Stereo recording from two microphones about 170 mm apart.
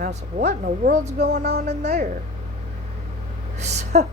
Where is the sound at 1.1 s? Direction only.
70° right (ahead or behind).